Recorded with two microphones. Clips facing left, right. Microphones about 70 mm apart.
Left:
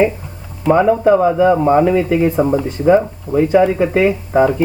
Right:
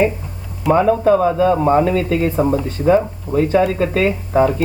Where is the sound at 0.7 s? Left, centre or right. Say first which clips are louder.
Left 2 dB; centre.